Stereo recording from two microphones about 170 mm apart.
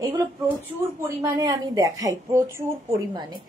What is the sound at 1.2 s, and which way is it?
A woman's voice, 20° right (ahead or behind).